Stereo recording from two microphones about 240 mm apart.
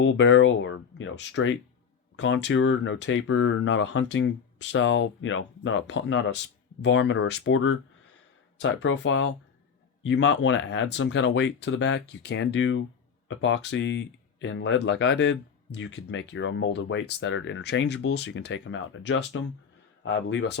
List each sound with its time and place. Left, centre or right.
0.0 s speech: left